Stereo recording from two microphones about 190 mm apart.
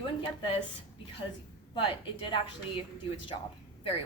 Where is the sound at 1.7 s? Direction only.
25° left (ahead or behind).